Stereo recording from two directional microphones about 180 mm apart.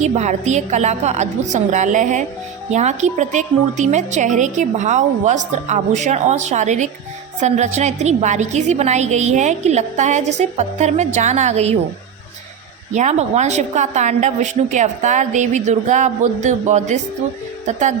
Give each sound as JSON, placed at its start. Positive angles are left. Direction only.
{"t": 0.0, "sound": "a woman's voice", "side_deg": -40}
{"t": 12.9, "sound": "a woman's voice", "side_deg": -40}